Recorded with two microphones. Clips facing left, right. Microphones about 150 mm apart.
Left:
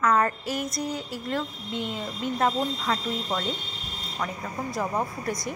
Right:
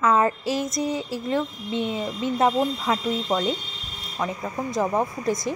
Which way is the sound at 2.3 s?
20° right (ahead or behind).